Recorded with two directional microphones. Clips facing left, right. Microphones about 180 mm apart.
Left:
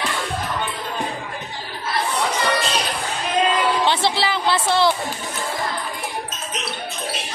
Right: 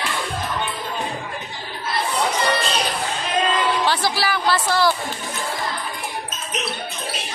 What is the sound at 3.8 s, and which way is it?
Music, 25° left (ahead or behind).